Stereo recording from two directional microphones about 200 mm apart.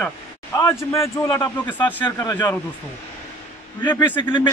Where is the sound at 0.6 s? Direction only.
15° left (ahead or behind).